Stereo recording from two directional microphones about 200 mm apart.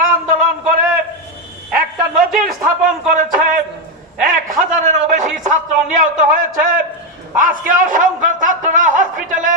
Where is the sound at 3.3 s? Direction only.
40° right (ahead or behind).